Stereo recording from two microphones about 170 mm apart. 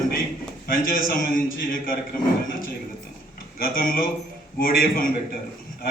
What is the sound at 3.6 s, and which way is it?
A man's voice, 55° left (ahead or behind).